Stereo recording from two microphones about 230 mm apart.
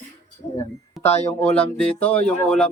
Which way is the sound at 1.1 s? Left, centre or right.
Left.